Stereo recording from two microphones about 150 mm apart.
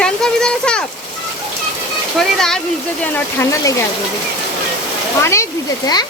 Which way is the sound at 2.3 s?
5° left (ahead or behind).